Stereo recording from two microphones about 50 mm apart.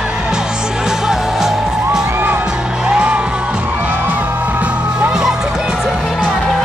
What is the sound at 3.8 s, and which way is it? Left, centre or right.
Music, right.